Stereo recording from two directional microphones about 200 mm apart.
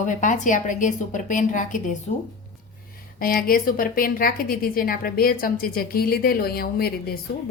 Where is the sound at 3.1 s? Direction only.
45° left (ahead or behind).